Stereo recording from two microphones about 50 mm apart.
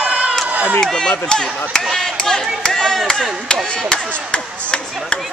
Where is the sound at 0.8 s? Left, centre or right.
Centre.